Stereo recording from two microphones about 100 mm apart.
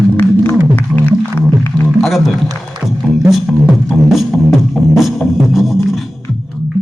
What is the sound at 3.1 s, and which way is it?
Music, 5° right (ahead or behind).